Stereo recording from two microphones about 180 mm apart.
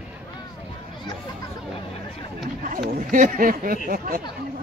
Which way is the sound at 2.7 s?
50° right (ahead or behind).